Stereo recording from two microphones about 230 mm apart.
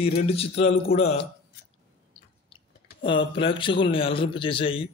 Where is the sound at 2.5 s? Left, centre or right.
Left.